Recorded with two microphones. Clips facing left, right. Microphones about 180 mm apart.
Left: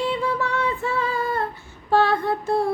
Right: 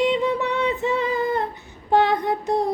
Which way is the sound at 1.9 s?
20° right (ahead or behind).